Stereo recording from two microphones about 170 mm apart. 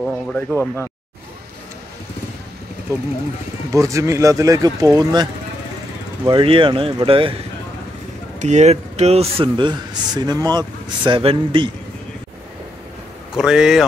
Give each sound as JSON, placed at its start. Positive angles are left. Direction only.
{"t": 0.0, "sound": "speech", "side_deg": 5}
{"t": 3.7, "sound": "a man's voice", "side_deg": -20}
{"t": 8.4, "sound": "a man's voice", "side_deg": -45}
{"t": 13.3, "sound": "speech", "side_deg": -5}